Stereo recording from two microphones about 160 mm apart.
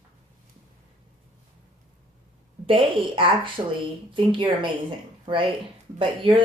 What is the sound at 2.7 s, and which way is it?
Speech, 35° right (ahead or behind).